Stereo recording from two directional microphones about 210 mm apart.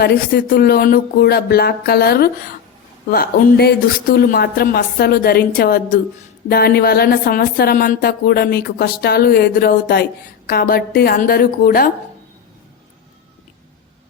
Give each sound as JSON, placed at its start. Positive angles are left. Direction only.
{"t": 0.0, "sound": "speech", "side_deg": 50}